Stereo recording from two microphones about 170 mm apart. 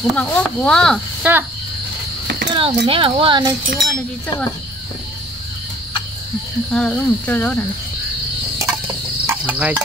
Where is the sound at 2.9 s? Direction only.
30° right (ahead or behind).